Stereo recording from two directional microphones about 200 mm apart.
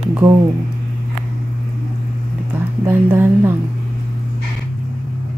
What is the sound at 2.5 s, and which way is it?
Speech, 10° right (ahead or behind).